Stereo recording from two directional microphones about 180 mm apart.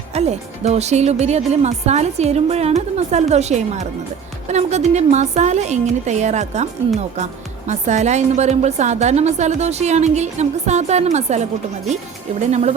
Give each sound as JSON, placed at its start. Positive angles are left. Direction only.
{"t": 0.1, "sound": "a woman's voice", "side_deg": -35}
{"t": 12.5, "sound": "a woman's voice", "side_deg": -40}